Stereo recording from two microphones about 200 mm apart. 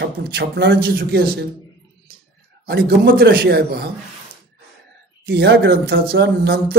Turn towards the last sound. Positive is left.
turn(degrees=-50)  # may be behind; listen again after turning